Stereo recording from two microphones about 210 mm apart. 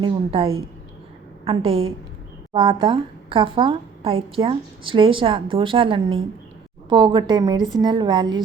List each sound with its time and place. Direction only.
0.0 s a woman's voice: 25° right (ahead or behind)